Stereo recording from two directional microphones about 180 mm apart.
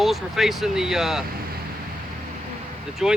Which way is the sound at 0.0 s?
Centre (ahead or behind).